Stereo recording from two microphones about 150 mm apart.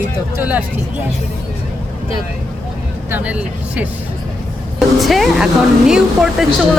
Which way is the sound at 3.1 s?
10° right (ahead or behind).